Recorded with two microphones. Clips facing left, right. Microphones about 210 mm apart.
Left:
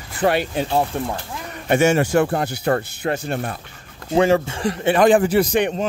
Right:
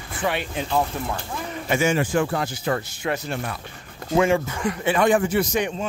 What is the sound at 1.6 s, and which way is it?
Speech, 60° left (ahead or behind).